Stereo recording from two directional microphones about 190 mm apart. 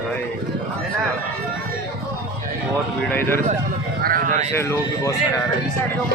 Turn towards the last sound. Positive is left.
turn(degrees=15)  # may be behind; listen again after turning